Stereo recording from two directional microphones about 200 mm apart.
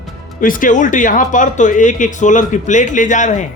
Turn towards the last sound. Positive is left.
turn(degrees=35)  # may be behind; listen again after turning